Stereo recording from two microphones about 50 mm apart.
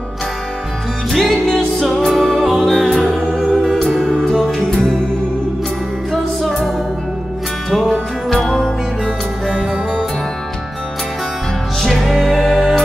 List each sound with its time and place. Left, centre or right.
1.1 s music: centre
4.2 s music: centre
7.9 s music: centre
11.8 s music: centre